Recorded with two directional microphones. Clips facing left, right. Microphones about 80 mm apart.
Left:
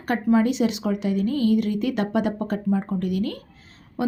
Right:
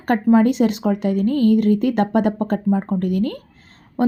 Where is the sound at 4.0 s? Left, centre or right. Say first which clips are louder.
Right 7 dB; right.